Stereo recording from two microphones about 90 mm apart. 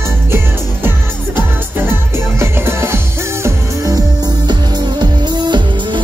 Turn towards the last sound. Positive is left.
turn(degrees=-55)  # may be behind; listen again after turning